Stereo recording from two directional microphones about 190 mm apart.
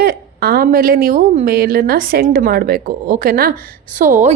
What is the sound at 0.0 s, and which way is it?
A woman's voice, 55° right (ahead or behind).